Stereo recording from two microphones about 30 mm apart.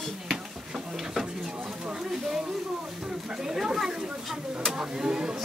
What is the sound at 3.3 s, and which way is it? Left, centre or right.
Speech, centre.